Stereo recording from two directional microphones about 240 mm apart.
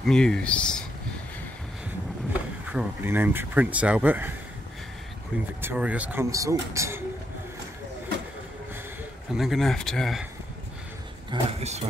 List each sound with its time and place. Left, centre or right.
0.0 s speech: centre
2.7 s speech: centre
5.6 s speech: centre
9.3 s speech: centre
11.2 s speech: right